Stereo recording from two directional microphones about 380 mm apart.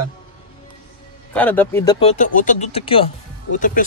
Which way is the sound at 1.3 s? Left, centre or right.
Centre.